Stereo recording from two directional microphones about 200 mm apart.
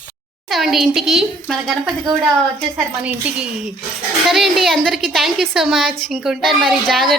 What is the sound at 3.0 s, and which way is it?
A woman's voice, 5° right (ahead or behind).